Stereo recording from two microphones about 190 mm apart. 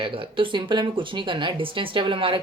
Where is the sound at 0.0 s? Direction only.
30° right (ahead or behind).